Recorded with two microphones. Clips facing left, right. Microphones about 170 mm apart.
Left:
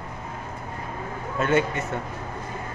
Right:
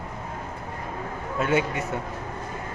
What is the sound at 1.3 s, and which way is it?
Speech, 10° right (ahead or behind).